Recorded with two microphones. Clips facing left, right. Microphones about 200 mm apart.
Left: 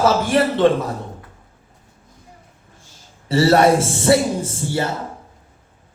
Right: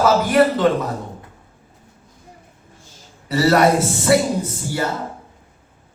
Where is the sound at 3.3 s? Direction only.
30° left (ahead or behind).